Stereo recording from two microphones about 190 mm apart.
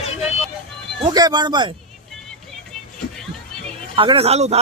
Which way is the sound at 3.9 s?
25° right (ahead or behind).